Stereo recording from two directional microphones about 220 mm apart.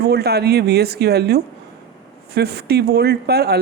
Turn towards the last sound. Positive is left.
turn(degrees=-45)  # may be behind; listen again after turning